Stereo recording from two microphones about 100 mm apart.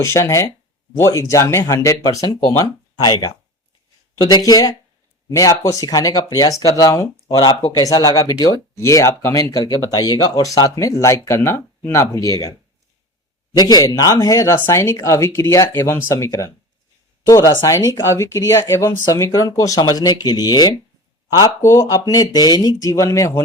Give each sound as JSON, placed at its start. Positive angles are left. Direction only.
{"t": 0.0, "sound": "speech", "side_deg": 30}
{"t": 13.6, "sound": "speech", "side_deg": 40}